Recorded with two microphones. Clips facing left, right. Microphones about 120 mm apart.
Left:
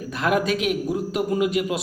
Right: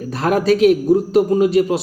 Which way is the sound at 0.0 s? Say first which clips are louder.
Right 5 dB; 35° right (ahead or behind).